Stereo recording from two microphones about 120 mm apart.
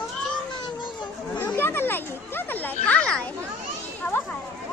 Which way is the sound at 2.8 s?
10° left (ahead or behind).